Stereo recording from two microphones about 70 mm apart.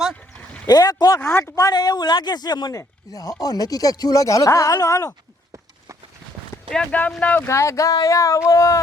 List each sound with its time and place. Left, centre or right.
0.1 s a sound: centre
0.7 s speech: left
1.2 s speech: left
1.7 s speech: left
2.7 s speech: left
7.2 s speech: left
7.4 s speech: left